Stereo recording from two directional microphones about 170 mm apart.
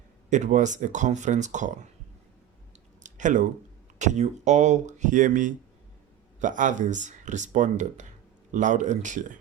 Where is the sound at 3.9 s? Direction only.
45° right (ahead or behind).